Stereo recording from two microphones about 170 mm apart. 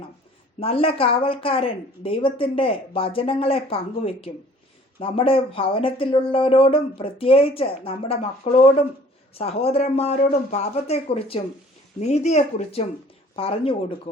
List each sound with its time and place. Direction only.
0.6 s speech: 35° left (ahead or behind)
13.3 s speech: 35° left (ahead or behind)